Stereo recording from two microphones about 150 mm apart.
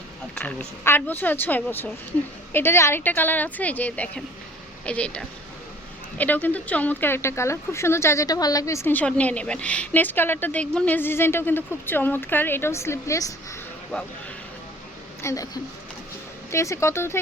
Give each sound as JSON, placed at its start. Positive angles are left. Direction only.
{"t": 0.3, "sound": "speech", "side_deg": 10}
{"t": 15.2, "sound": "a woman's voice", "side_deg": 20}
{"t": 16.5, "sound": "speech", "side_deg": 20}